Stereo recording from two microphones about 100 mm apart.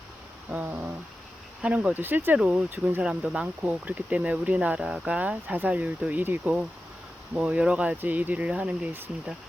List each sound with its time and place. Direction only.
0.5 s cat: 15° right (ahead or behind)
1.6 s speech: 15° right (ahead or behind)
3.0 s speech: 10° right (ahead or behind)